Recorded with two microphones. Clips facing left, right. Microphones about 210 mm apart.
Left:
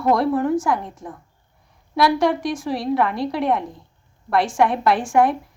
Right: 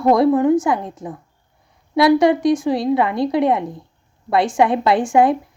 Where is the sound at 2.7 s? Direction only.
20° right (ahead or behind).